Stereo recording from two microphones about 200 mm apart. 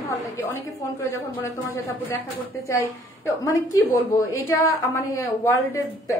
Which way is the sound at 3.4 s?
15° left (ahead or behind).